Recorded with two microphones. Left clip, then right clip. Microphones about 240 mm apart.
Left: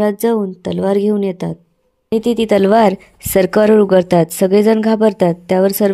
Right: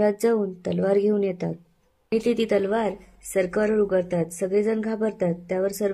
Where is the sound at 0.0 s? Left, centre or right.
Left.